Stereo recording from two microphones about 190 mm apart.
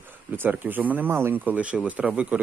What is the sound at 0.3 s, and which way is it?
Speech, 10° right (ahead or behind).